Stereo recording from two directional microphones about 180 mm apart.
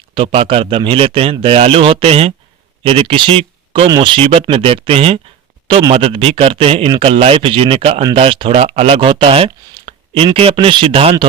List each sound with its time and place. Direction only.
0.1 s a man's voice: 30° right (ahead or behind)